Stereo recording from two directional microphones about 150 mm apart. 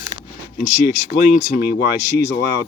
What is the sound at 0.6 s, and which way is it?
Speech, 55° left (ahead or behind).